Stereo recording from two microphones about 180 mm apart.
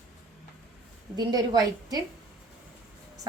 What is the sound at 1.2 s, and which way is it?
Speech, 20° right (ahead or behind).